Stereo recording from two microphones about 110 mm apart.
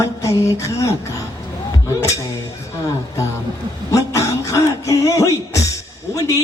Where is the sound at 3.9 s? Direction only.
30° left (ahead or behind).